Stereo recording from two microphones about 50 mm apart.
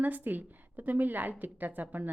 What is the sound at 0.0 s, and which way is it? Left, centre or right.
A woman's voice, right.